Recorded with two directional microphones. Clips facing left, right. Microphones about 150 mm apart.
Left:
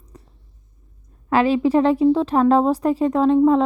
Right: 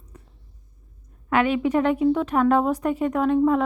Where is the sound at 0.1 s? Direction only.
35° left (ahead or behind).